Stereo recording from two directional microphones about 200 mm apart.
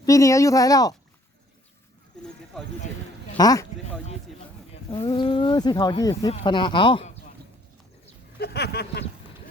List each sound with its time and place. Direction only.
0.0 s speech: 15° left (ahead or behind)
2.5 s speech: centre (ahead or behind)
3.3 s speech: 20° left (ahead or behind)
4.9 s speech: 20° left (ahead or behind)
8.4 s a sound: 55° left (ahead or behind)